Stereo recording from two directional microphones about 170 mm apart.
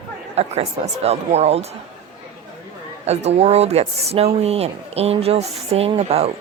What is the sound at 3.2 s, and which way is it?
Speech, 40° right (ahead or behind).